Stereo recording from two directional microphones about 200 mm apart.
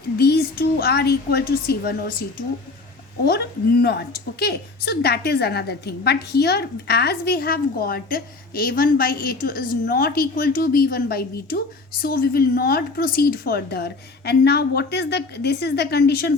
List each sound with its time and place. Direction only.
0.2 s a woman's voice: 50° left (ahead or behind)
3.2 s a woman's voice: 55° left (ahead or behind)